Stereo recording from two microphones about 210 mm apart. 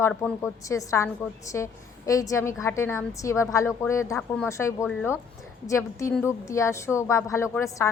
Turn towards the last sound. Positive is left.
turn(degrees=15)  # may be behind; listen again after turning